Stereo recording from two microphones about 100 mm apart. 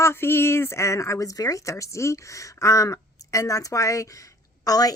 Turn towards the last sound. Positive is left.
turn(degrees=40)  # may be behind; listen again after turning